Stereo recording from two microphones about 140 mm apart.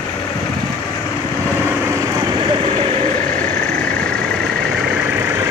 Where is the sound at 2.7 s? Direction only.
40° right (ahead or behind).